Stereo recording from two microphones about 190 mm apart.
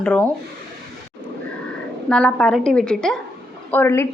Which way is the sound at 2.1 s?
5° left (ahead or behind).